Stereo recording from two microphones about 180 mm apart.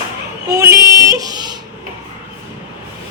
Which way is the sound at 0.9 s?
20° right (ahead or behind).